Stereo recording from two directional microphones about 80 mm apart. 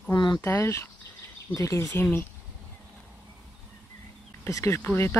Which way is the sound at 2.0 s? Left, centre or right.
Left.